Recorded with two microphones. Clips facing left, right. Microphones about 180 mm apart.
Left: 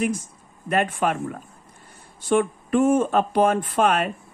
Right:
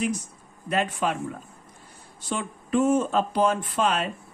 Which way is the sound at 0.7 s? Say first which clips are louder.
Left 3 dB; 55° left (ahead or behind).